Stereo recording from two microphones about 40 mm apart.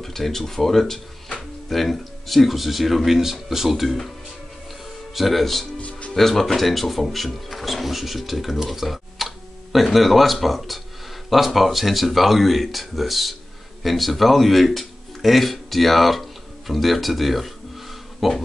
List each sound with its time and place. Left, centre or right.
0.0 s speech: centre
5.1 s speech: centre
5.8 s music: left
6.1 s speech: centre
18.2 s a sound: centre